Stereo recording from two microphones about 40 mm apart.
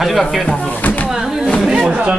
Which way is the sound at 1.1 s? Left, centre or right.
Centre.